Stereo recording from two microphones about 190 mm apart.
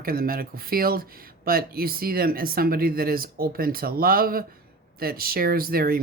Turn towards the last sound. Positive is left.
turn(degrees=-50)  # may be behind; listen again after turning